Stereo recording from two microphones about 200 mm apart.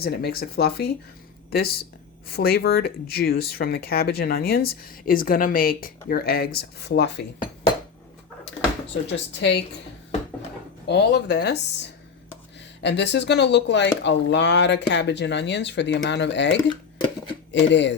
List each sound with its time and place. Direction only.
0.0 s speech: 50° left (ahead or behind)
9.0 s speech: 60° left (ahead or behind)
10.8 s speech: 55° left (ahead or behind)